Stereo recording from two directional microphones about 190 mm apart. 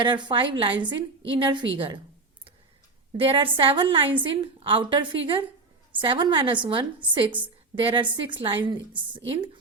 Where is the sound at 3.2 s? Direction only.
25° right (ahead or behind).